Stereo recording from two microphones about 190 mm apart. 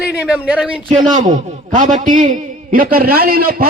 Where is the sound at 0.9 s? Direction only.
40° right (ahead or behind).